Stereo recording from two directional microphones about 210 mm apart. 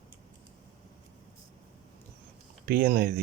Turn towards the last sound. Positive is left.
turn(degrees=-45)  # may be behind; listen again after turning